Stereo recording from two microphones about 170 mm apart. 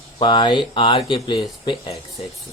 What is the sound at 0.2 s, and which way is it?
Speech, 30° left (ahead or behind).